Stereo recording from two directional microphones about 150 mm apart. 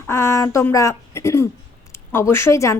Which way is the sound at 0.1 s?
20° left (ahead or behind).